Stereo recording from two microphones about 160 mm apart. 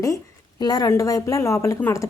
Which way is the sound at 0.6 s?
25° left (ahead or behind).